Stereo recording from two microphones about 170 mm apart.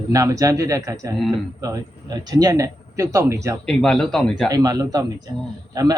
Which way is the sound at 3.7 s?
5° left (ahead or behind).